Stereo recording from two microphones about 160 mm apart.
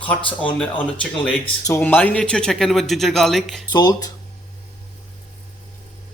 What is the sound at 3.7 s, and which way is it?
Speech, 25° left (ahead or behind).